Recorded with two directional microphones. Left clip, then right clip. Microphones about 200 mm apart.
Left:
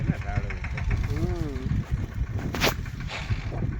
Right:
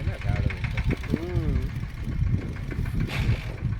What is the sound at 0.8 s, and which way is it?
Mechanisms, 45° right (ahead or behind).